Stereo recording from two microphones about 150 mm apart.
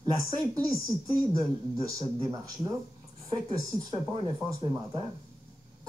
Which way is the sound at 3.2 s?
30° right (ahead or behind).